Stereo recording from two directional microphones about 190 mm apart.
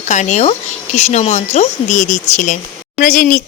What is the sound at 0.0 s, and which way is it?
Speech, 40° left (ahead or behind).